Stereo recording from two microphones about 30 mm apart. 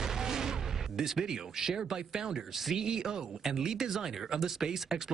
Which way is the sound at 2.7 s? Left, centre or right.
Centre.